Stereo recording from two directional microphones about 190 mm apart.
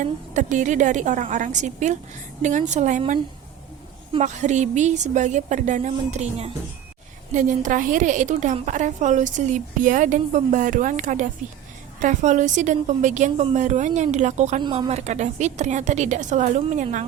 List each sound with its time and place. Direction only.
0.0 s a woman's voice: 40° right (ahead or behind)
4.2 s a woman's voice: 40° right (ahead or behind)
14.6 s speech: 25° right (ahead or behind)
14.9 s a woman's voice: 35° right (ahead or behind)